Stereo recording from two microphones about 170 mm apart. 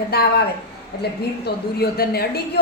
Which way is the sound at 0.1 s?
70° left (ahead or behind).